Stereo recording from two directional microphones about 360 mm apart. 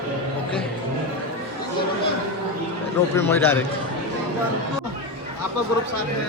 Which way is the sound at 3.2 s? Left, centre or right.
Centre.